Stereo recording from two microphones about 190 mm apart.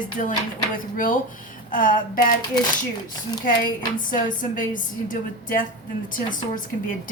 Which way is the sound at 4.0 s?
45° left (ahead or behind).